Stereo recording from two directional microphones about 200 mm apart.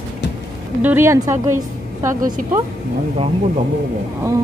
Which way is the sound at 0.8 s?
10° right (ahead or behind).